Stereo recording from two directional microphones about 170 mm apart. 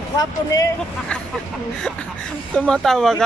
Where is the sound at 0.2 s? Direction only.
20° left (ahead or behind).